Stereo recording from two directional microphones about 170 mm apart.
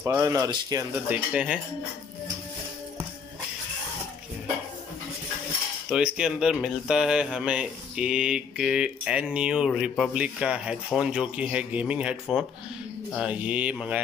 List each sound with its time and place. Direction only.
0.0 s speech: 15° right (ahead or behind)
1.0 s speech: 10° right (ahead or behind)
5.9 s speech: 5° right (ahead or behind)